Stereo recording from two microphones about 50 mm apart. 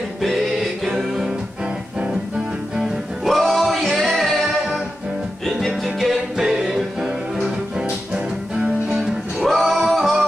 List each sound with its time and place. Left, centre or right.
0.2 s music: centre
2.8 s music: centre
5.7 s music: centre
8.1 s music: right
8.9 s music: centre